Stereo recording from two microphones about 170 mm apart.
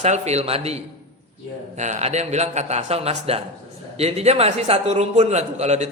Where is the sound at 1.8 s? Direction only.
40° right (ahead or behind).